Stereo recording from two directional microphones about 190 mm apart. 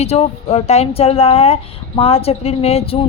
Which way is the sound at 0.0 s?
35° left (ahead or behind).